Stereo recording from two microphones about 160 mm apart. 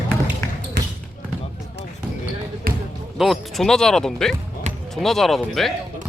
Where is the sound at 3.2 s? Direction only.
Centre (ahead or behind).